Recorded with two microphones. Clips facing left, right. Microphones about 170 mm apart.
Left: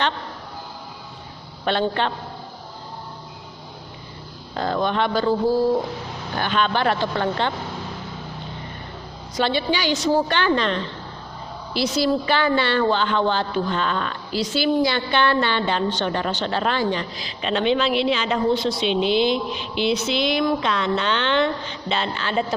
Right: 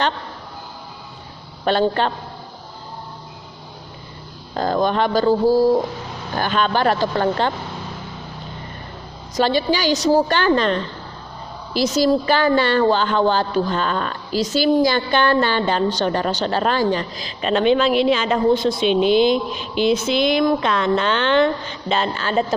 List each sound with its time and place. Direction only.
1.6 s a woman's voice: 40° right (ahead or behind)
4.5 s a woman's voice: 40° right (ahead or behind)
9.3 s a woman's voice: 40° right (ahead or behind)